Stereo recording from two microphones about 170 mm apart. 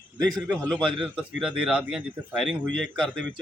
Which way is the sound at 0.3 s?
5° left (ahead or behind).